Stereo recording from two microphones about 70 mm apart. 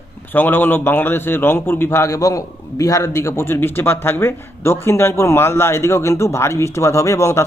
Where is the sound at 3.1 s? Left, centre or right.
Left.